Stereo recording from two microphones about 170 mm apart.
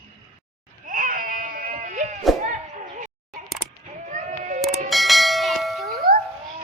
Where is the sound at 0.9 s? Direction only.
55° right (ahead or behind).